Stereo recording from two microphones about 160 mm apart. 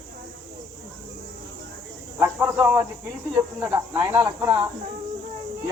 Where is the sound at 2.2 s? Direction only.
20° right (ahead or behind).